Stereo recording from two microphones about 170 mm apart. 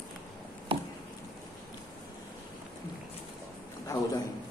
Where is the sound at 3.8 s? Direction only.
20° left (ahead or behind).